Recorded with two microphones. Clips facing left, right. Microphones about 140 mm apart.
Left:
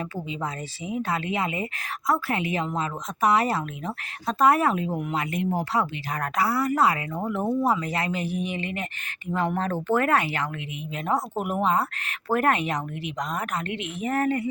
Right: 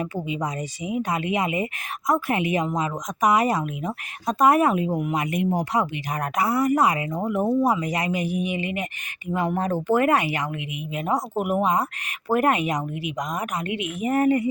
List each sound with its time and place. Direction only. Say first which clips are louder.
0.0 s a woman's voice: right 4 dB; 15° right (ahead or behind)